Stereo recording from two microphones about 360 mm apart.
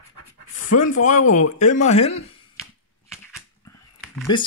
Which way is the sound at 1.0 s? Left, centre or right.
Left.